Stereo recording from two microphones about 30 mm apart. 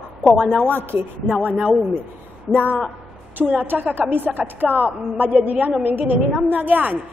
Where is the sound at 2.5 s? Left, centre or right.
Left.